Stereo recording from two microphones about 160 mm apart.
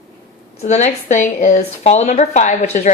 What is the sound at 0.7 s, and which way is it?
A woman's voice, 45° left (ahead or behind).